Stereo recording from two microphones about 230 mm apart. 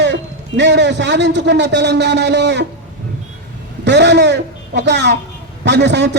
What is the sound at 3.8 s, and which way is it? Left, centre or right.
A man's voice, right.